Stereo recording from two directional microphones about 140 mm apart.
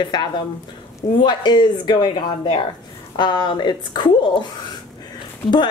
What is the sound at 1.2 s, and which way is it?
A woman's voice, 30° left (ahead or behind).